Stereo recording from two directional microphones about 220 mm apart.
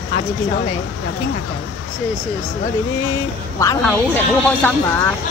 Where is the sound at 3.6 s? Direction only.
15° left (ahead or behind).